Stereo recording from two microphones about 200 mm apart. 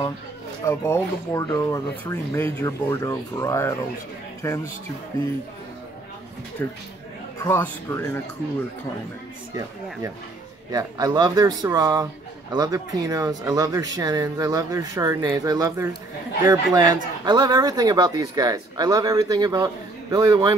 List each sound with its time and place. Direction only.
0.7 s speech: 15° left (ahead or behind)
7.4 s speech: 10° left (ahead or behind)
10.7 s speech: 20° right (ahead or behind)